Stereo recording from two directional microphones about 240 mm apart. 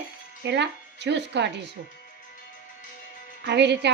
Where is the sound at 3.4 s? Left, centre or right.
Right.